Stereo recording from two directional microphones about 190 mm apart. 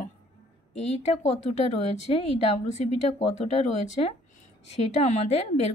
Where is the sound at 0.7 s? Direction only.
35° left (ahead or behind).